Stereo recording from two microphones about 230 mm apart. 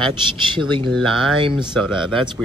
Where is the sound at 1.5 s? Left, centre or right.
Centre.